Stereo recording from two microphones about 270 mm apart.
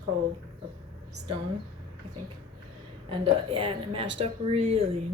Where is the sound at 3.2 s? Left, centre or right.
Centre.